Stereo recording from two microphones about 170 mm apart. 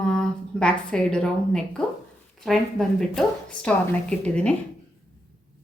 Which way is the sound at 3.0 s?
5° left (ahead or behind).